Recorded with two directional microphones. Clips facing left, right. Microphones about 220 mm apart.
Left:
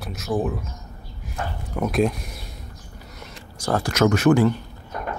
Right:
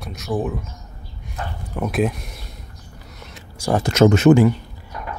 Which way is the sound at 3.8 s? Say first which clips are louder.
Right 5 dB; 25° right (ahead or behind).